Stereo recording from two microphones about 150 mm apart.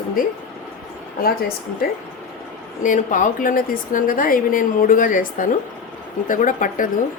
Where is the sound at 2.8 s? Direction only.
60° left (ahead or behind).